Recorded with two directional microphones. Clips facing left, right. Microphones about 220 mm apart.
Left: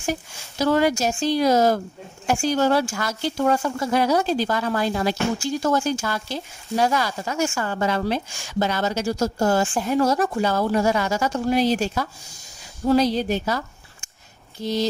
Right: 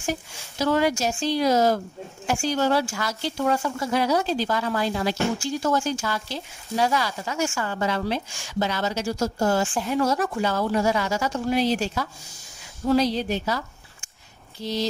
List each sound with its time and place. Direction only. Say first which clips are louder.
0.6 s speech: left 3 dB; 45° left (ahead or behind)